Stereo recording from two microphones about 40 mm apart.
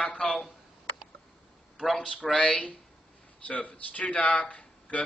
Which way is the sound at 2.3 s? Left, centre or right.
Left.